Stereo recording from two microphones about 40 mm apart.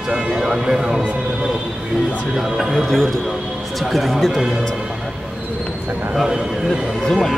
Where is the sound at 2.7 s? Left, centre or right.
Centre.